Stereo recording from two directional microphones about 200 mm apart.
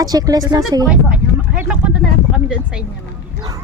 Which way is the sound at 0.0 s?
20° right (ahead or behind).